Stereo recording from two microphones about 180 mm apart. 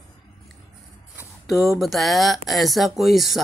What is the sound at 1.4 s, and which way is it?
A woman's voice, centre (ahead or behind).